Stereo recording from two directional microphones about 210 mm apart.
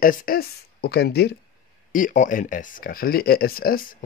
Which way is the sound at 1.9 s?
40° left (ahead or behind).